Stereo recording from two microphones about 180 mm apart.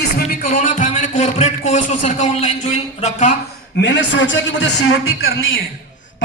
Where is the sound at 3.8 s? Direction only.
80° left.